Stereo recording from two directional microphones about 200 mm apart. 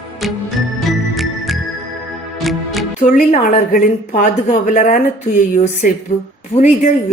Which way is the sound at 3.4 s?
45° left (ahead or behind).